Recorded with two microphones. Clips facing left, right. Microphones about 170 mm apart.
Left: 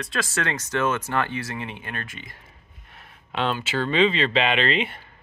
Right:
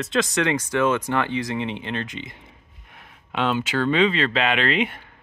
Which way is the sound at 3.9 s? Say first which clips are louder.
Even; 5° right (ahead or behind).